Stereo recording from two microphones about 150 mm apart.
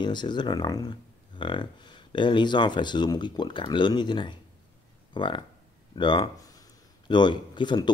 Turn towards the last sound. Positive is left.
turn(degrees=30)  # may be behind; listen again after turning